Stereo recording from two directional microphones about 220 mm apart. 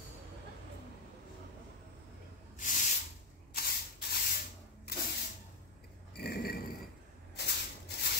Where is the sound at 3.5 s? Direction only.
45° left (ahead or behind).